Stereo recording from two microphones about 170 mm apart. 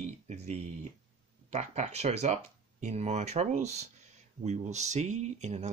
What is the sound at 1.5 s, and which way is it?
Speech, 40° right (ahead or behind).